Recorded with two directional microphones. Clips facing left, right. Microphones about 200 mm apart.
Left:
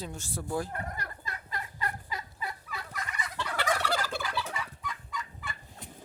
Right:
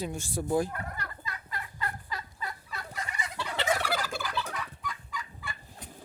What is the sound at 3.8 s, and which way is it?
Gobble, 5° right (ahead or behind).